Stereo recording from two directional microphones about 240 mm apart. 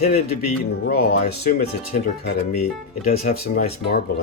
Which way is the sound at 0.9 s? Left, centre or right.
Left.